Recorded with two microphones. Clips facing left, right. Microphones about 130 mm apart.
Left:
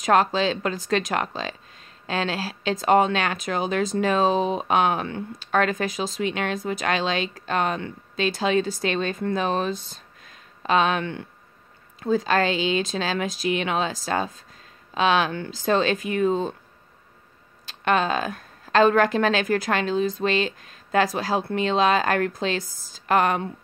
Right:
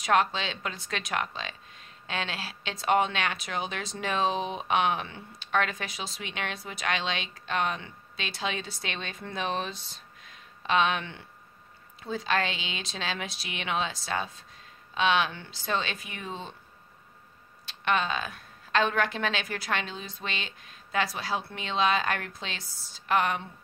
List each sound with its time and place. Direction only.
0.0 s speech: 40° left (ahead or behind)
10.2 s a sound: 45° left (ahead or behind)
12.0 s speech: 45° left (ahead or behind)
17.6 s a woman's voice: 40° left (ahead or behind)